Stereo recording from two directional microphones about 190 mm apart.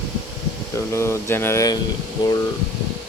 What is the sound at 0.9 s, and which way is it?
Speech, 15° left (ahead or behind).